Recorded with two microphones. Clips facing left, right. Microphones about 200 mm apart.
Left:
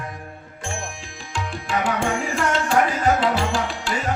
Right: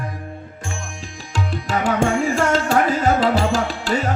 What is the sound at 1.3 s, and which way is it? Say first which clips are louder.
Tabla: right 3 dB; 40° right (ahead or behind).